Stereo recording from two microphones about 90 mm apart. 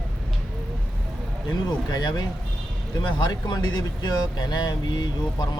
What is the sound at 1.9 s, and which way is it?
Speech, 50° left (ahead or behind).